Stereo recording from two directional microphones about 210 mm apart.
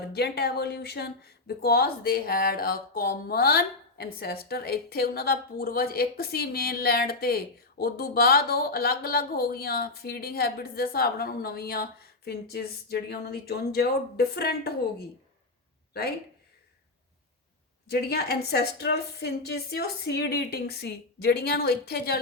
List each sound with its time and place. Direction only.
0.1 s speech: 50° left (ahead or behind)
17.8 s speech: 50° left (ahead or behind)